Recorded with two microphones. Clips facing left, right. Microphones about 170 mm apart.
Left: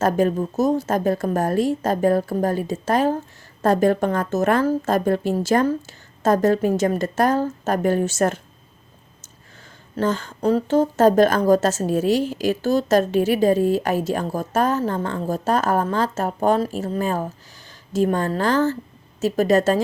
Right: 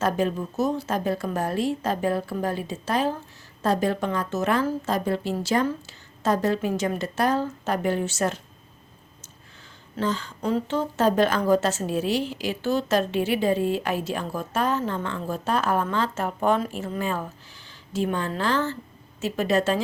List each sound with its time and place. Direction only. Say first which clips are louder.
0.0 s a woman's voice: left 5 dB; 45° left (ahead or behind)
10.0 s a woman's voice: left 5 dB; 50° left (ahead or behind)